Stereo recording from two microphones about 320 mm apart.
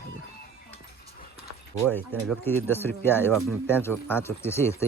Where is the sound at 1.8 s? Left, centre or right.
Centre.